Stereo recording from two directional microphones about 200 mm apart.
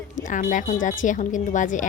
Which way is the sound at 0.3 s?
40° left (ahead or behind).